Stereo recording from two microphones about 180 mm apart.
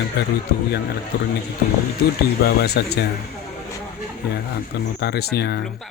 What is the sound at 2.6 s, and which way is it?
Speech, 65° left (ahead or behind).